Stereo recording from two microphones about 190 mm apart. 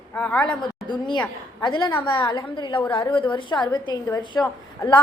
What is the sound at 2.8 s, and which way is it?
Speech, 10° left (ahead or behind).